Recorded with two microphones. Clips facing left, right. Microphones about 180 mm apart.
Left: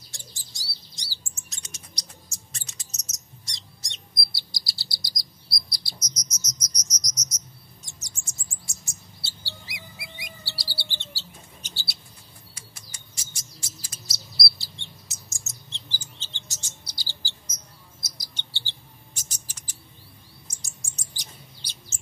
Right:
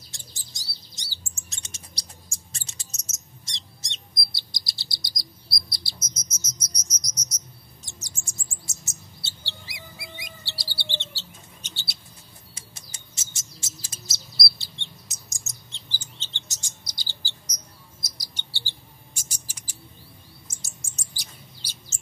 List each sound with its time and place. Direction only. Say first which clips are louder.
0.1 s bird: left 2 dB; 20° right (ahead or behind)
5.5 s insect: left 1 dB; 25° right (ahead or behind)
7.8 s chirp: right 3 dB; 30° right (ahead or behind)
9.5 s bird: even; 25° right (ahead or behind)
18.0 s chirp: even; 10° right (ahead or behind)
18.7 s mouse: right 1 dB; 10° right (ahead or behind)
20.4 s chirp: right 1 dB; 10° right (ahead or behind)